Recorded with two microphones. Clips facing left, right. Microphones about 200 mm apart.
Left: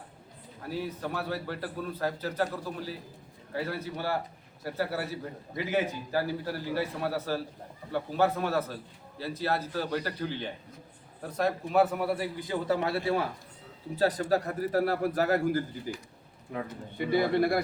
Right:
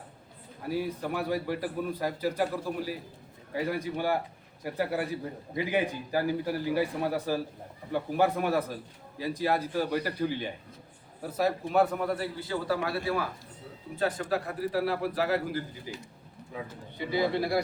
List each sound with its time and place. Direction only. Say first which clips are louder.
0.7 s a man's voice: right 3 dB; 10° right (ahead or behind); by 13.2 s 25° left (ahead or behind)
13.9 s a man's voice: left 3 dB; 35° left (ahead or behind)
17.0 s a man's voice: left 3 dB; 55° left (ahead or behind)